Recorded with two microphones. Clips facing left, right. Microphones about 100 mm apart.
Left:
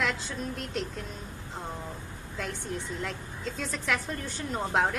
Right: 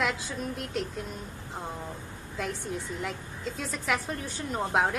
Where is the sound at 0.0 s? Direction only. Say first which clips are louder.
Right 1 dB; 5° right (ahead or behind).